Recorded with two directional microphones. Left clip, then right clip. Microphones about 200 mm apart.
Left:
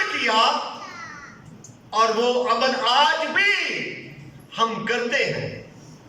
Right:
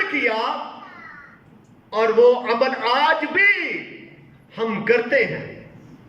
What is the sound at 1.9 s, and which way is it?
A man's voice, 25° right (ahead or behind).